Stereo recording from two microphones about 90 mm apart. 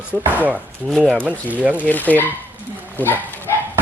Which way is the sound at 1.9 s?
20° left (ahead or behind).